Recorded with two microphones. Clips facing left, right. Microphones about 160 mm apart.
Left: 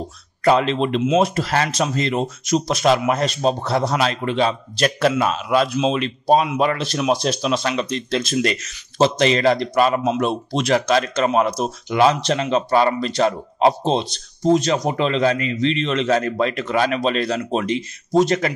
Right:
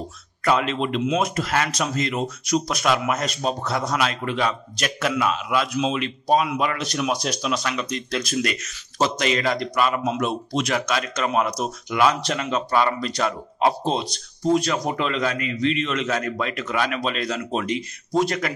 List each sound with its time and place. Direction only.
0.4 s speech: 30° left (ahead or behind)